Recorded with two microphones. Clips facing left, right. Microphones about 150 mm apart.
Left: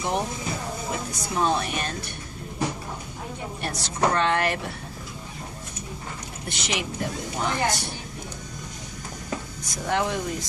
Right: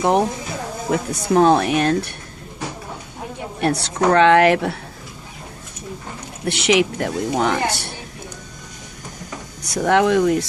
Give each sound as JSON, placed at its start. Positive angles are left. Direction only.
{"t": 0.0, "sound": "speech", "side_deg": -60}
{"t": 3.6, "sound": "speech", "side_deg": -65}
{"t": 6.4, "sound": "speech", "side_deg": -70}
{"t": 9.6, "sound": "speech", "side_deg": -70}